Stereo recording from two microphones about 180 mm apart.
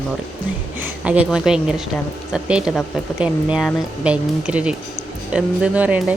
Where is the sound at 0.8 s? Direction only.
10° right (ahead or behind).